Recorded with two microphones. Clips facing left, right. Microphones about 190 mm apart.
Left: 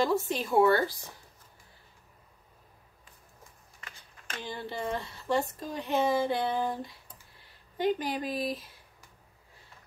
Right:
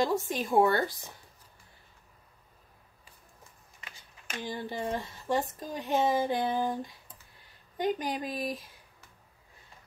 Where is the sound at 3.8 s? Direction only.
15° right (ahead or behind).